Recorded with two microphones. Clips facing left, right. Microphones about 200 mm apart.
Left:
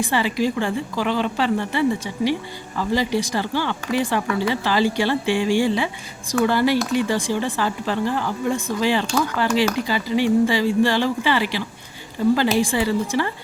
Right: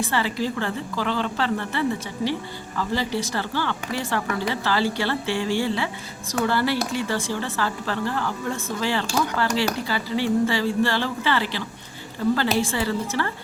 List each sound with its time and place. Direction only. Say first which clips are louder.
0.0 s speech: left 4 dB; 15° left (ahead or behind)